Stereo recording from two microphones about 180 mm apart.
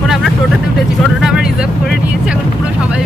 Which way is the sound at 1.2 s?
5° right (ahead or behind).